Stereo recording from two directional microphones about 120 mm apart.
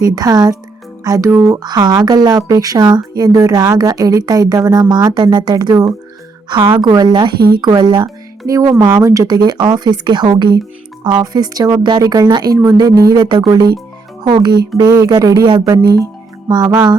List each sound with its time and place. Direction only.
0.0 s speech: 30° right (ahead or behind)